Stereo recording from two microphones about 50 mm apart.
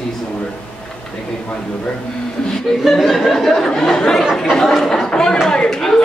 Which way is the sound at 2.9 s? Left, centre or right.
Centre.